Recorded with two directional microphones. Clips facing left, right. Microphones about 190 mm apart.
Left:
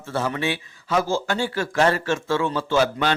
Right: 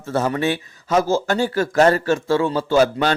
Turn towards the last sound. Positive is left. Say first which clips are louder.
# right 4 dB
turn(degrees=-40)  # may be behind; listen again after turning